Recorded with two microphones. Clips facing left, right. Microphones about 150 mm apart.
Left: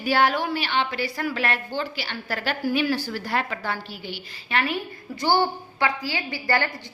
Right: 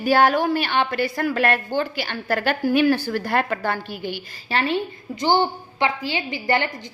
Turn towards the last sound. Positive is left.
turn(degrees=-20)  # may be behind; listen again after turning